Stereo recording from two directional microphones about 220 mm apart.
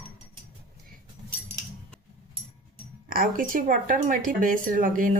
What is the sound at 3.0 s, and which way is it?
Speech, 40° right (ahead or behind).